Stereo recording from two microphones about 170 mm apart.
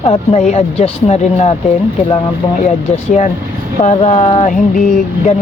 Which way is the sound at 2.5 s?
40° left (ahead or behind).